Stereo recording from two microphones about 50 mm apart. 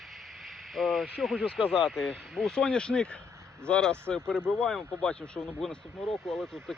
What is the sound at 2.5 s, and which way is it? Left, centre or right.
Speech, centre.